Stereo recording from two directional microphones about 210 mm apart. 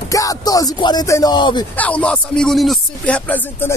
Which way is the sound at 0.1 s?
15° left (ahead or behind).